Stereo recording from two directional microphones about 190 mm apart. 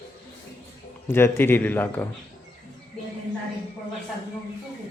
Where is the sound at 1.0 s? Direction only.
10° left (ahead or behind).